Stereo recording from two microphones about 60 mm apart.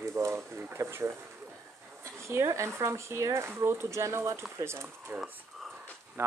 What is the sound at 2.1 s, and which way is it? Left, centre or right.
Speech, right.